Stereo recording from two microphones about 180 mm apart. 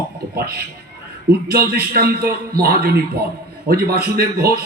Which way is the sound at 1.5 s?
60° right (ahead or behind).